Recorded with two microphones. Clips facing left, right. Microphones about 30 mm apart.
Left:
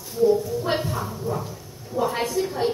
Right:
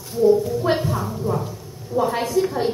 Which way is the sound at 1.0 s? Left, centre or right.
Right.